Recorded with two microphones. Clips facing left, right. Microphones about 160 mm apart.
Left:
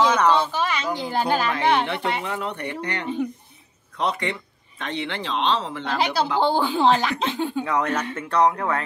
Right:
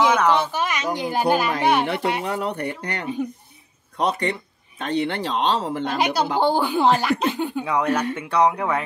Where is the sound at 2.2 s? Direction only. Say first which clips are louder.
Right 3 dB; 40° right (ahead or behind).